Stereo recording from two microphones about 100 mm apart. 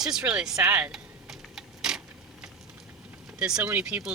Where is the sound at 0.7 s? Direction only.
15° right (ahead or behind).